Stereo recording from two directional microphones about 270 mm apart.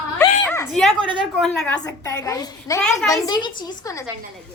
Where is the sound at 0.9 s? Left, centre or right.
Centre.